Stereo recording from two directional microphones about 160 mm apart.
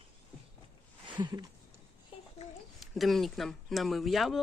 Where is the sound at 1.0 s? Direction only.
25° right (ahead or behind).